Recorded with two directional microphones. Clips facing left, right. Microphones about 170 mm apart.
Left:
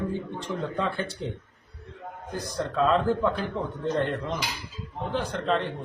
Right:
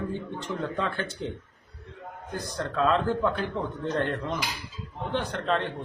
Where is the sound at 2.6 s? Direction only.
Centre (ahead or behind).